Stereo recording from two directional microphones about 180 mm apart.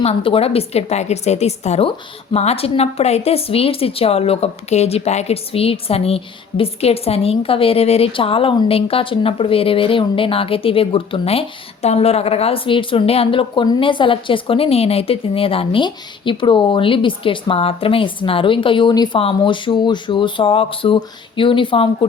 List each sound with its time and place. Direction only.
0.0 s a woman's voice: 30° left (ahead or behind)